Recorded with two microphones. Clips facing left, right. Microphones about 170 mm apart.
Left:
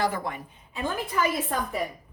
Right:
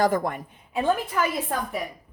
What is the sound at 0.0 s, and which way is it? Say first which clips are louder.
Speech: right 5 dB; 50° right (ahead or behind).